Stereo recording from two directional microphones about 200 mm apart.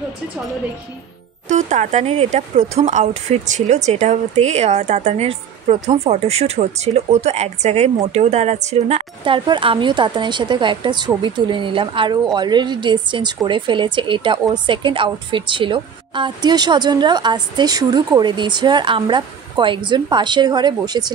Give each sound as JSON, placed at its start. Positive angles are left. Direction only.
{"t": 1.5, "sound": "speech", "side_deg": -35}